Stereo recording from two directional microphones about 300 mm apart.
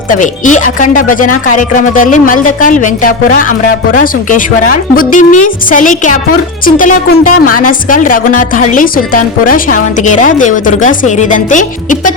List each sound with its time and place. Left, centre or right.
0.1 s a woman's voice: left